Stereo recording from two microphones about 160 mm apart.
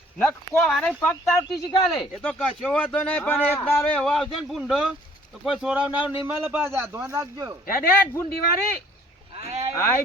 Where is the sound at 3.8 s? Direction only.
5° left (ahead or behind); by 7.6 s 20° right (ahead or behind).